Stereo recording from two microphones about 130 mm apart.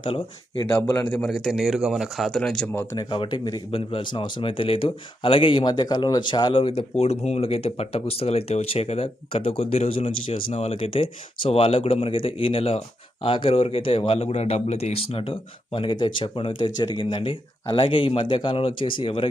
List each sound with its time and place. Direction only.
0.0 s speech: 40° left (ahead or behind)
1.1 s speech: 5° left (ahead or behind)
2.9 s speech: 35° left (ahead or behind)